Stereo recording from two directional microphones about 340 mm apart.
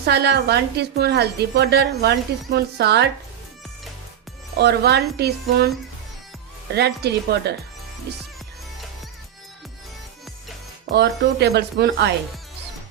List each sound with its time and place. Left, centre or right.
0.0 s a woman's voice: right
4.5 s a woman's voice: right
6.7 s a woman's voice: right
10.9 s a woman's voice: right